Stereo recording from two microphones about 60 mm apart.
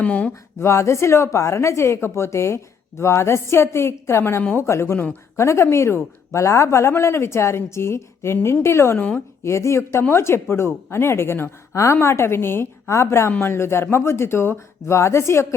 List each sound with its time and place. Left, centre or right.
0.0 s speech: left
0.6 s a woman's voice: left
9.0 s speech: left
9.4 s a woman's voice: left
10.0 s a woman's voice: left
11.7 s a woman's voice: left
11.9 s a woman's voice: left